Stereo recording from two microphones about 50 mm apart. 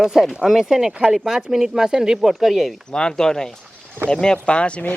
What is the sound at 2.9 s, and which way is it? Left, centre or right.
Speech, centre.